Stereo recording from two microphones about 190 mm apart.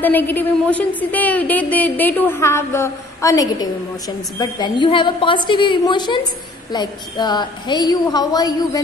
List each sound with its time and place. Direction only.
0.0 s a woman's voice: 10° left (ahead or behind)